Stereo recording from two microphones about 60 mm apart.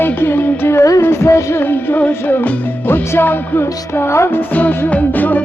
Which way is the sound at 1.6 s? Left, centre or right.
Left.